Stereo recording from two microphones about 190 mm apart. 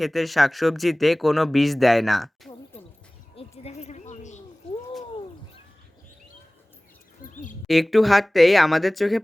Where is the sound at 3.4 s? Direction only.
35° left (ahead or behind).